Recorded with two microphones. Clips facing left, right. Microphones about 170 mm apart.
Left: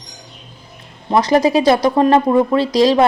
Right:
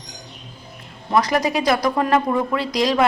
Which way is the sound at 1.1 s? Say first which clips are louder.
Left 6 dB; 25° left (ahead or behind).